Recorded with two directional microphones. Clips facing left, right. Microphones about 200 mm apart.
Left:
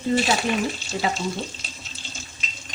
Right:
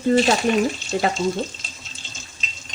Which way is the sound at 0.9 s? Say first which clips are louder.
Right 4 dB; 55° right (ahead or behind).